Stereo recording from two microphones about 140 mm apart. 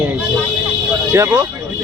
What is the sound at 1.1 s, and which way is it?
Speech, 20° right (ahead or behind).